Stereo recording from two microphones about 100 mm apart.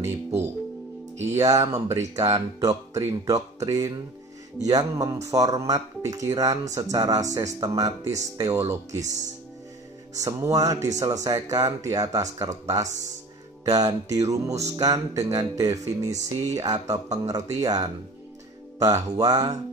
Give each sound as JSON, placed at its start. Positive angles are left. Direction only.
{"t": 1.2, "sound": "speech", "side_deg": -30}
{"t": 8.5, "sound": "speech", "side_deg": -25}